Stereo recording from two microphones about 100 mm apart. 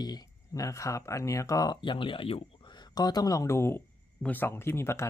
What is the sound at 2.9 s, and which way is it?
Speech, 40° left (ahead or behind).